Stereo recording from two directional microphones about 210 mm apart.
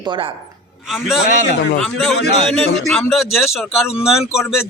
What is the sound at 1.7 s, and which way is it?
Speech, centre (ahead or behind).